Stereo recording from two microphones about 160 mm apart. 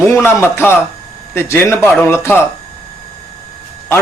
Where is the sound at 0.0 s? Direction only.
15° left (ahead or behind).